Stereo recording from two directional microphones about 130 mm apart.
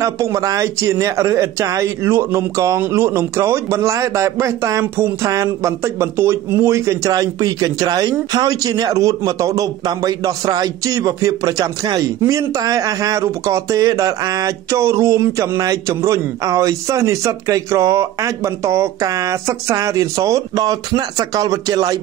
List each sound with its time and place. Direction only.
0.0 s a man's voice: 25° right (ahead or behind)